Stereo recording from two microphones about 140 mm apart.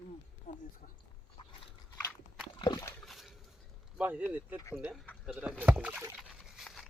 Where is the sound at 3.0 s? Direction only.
Centre (ahead or behind).